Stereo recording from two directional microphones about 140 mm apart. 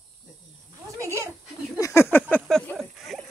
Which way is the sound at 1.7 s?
20° left (ahead or behind).